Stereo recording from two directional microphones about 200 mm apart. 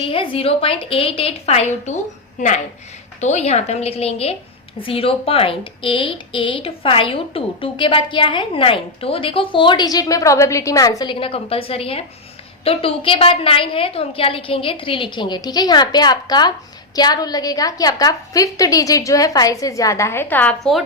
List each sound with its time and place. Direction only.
0.0 s a woman's voice: 25° left (ahead or behind); by 20.8 s 5° left (ahead or behind)